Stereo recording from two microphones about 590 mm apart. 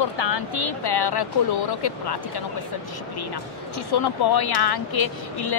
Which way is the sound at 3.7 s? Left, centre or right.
Left.